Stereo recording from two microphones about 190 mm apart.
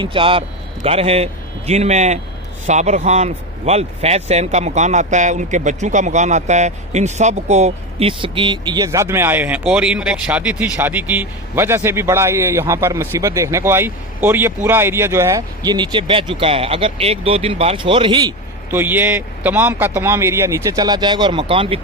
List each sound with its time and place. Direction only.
0.0 s a man's voice: 25° right (ahead or behind)